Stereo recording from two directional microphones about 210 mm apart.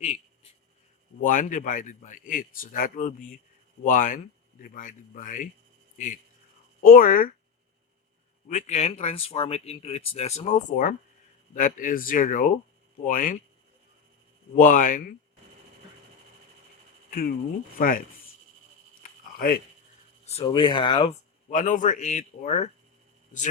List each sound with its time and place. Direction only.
0.0 s writing: 30° left (ahead or behind)
1.2 s speech: 40° left (ahead or behind)
6.8 s speech: 40° left (ahead or behind)
8.4 s speech: 35° left (ahead or behind)
14.5 s speech: 40° left (ahead or behind)
17.1 s speech: 45° left (ahead or behind)
19.0 s a sound: 45° left (ahead or behind)
20.2 s speech: 25° left (ahead or behind)
21.5 s speech: 40° left (ahead or behind)